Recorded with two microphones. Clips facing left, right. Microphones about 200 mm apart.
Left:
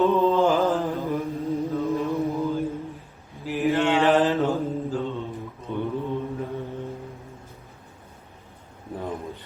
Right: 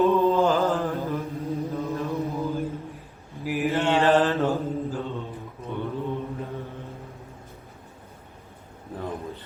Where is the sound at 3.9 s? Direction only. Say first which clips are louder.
Right 2 dB; 15° left (ahead or behind).